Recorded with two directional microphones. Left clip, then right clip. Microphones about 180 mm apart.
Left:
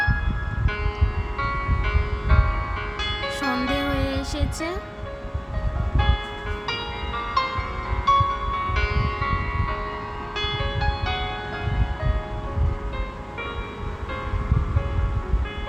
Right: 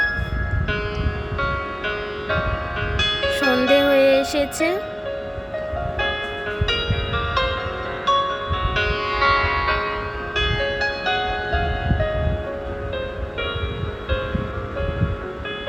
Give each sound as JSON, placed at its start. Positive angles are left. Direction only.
{"t": 1.4, "sound": "music", "side_deg": -20}
{"t": 6.7, "sound": "music", "side_deg": -15}
{"t": 9.1, "sound": "music", "side_deg": -40}
{"t": 10.3, "sound": "music", "side_deg": -10}